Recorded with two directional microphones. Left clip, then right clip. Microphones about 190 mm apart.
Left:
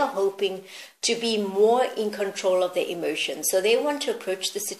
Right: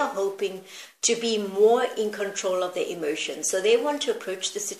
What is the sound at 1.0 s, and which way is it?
Speech, 35° left (ahead or behind).